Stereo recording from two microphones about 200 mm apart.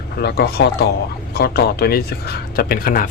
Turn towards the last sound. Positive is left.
turn(degrees=45)  # may be behind; listen again after turning